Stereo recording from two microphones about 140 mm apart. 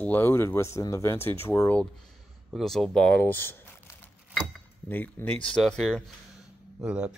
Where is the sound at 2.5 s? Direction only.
Centre (ahead or behind); by 3.6 s 15° left (ahead or behind).